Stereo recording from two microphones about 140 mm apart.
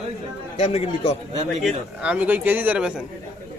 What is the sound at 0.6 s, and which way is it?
Speech, 45° left (ahead or behind).